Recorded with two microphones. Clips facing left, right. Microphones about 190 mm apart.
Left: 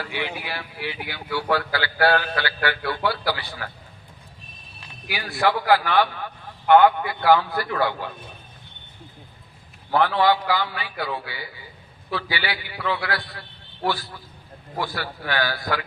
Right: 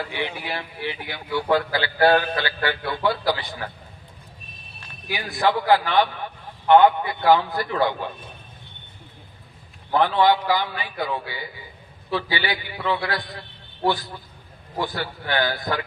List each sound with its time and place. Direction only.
0.0 s a man's voice: 15° right (ahead or behind)
5.1 s a man's voice: 20° right (ahead or behind)
9.9 s a man's voice: 20° right (ahead or behind)